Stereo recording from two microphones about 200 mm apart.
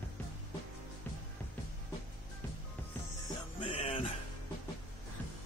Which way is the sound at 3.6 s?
30° left (ahead or behind).